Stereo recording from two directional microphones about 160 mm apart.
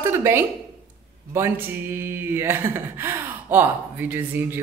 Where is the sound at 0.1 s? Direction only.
15° right (ahead or behind).